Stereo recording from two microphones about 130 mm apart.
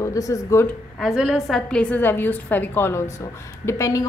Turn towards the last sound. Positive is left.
turn(degrees=25)  # may be behind; listen again after turning